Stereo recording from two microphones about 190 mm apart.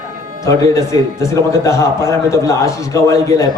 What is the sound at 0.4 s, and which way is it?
A man's voice, 15° left (ahead or behind).